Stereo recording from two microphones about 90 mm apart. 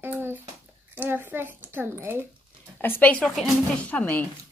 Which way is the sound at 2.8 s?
25° left (ahead or behind).